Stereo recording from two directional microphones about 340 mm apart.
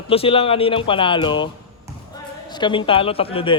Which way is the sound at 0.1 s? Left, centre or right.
Centre.